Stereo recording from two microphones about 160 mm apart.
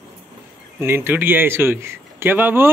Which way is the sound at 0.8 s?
15° right (ahead or behind).